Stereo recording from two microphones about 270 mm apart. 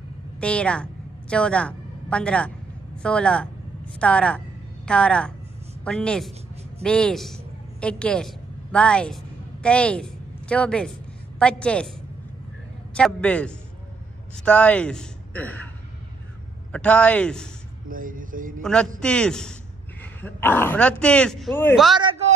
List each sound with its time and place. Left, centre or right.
0.4 s a man's voice: centre
12.9 s a man's voice: centre
16.7 s a man's voice: centre
17.8 s speech: right
18.6 s a man's voice: centre